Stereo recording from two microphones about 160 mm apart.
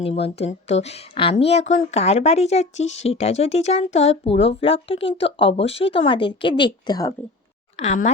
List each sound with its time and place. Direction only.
0.0 s speech: 40° left (ahead or behind)
7.8 s speech: 45° left (ahead or behind)